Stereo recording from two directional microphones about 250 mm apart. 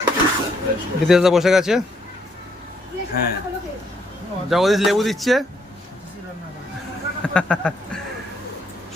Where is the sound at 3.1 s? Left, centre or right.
Left.